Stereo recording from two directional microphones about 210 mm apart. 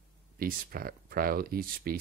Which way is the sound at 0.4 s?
45° right (ahead or behind).